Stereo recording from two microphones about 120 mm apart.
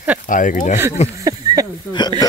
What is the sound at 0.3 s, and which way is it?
Speech, 90° left.